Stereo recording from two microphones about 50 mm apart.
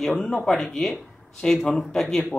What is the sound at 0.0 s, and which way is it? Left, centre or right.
Speech, centre.